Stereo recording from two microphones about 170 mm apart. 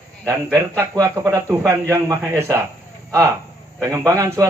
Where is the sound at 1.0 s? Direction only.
20° right (ahead or behind).